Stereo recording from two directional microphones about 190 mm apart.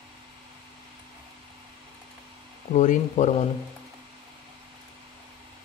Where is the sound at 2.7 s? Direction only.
40° left (ahead or behind).